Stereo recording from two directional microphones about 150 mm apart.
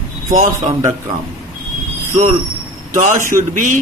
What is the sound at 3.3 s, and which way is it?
Speech, 60° right (ahead or behind).